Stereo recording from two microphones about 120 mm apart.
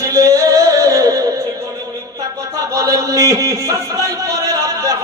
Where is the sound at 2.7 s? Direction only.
30° right (ahead or behind).